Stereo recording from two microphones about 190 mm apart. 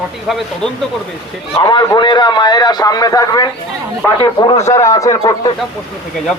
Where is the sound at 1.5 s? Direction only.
25° left (ahead or behind).